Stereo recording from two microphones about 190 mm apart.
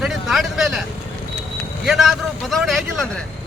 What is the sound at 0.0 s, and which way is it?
Vehicle, centre (ahead or behind).